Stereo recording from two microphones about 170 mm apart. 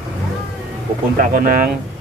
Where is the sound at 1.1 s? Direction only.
55° right (ahead or behind).